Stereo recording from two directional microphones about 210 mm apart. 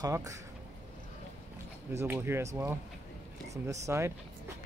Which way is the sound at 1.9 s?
10° right (ahead or behind).